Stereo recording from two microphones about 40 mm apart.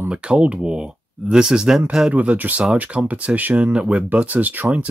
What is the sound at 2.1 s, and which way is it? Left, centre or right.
Speech, right.